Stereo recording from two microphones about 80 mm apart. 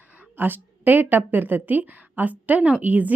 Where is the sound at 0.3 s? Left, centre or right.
Right.